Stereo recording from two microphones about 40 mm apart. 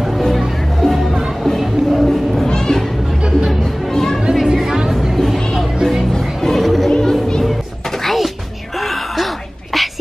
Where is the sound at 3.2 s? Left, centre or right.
Right.